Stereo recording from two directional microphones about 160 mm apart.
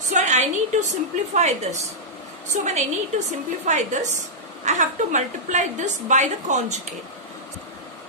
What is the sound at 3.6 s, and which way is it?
A woman's voice, 50° right (ahead or behind).